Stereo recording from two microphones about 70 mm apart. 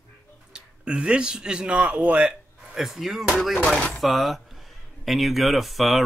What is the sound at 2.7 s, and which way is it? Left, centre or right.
Speech, centre.